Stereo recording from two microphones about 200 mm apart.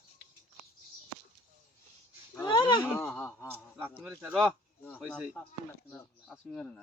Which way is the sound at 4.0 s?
5° right (ahead or behind).